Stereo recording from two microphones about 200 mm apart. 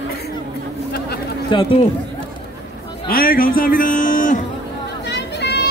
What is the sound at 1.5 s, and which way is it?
Speech, 25° left (ahead or behind).